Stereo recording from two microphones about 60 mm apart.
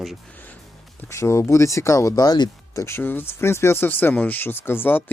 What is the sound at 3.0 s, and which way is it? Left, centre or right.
Speech, left.